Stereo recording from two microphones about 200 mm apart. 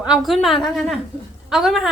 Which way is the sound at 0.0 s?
5° right (ahead or behind).